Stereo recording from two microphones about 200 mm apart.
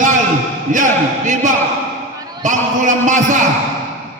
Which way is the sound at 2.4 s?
40° right (ahead or behind).